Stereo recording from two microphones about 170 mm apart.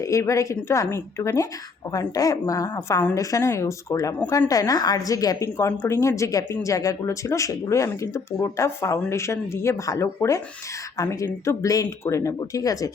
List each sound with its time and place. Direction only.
0.0 s speech: 20° left (ahead or behind)